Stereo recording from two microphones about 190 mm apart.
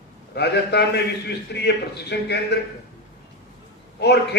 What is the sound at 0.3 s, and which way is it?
A man's voice, 60° left (ahead or behind).